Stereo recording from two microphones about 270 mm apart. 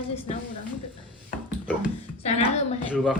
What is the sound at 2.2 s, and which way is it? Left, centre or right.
Speech, left.